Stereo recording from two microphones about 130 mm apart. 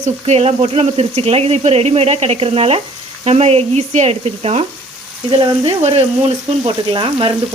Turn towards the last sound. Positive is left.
turn(degrees=-40)  # may be behind; listen again after turning